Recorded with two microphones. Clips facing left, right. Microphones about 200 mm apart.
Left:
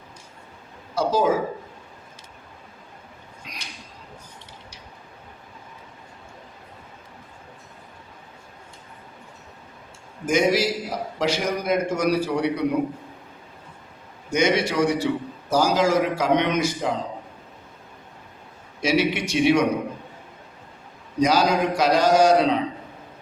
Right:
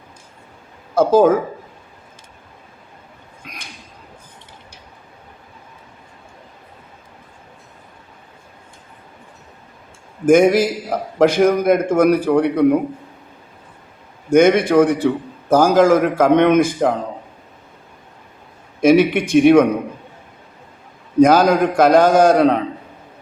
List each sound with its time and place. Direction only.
0.9 s a man's voice: 55° right (ahead or behind)
3.4 s a sound: 55° right (ahead or behind)
10.2 s a man's voice: 55° right (ahead or behind)
14.3 s a man's voice: 55° right (ahead or behind)
18.8 s a man's voice: 55° right (ahead or behind)
21.2 s a man's voice: 55° right (ahead or behind)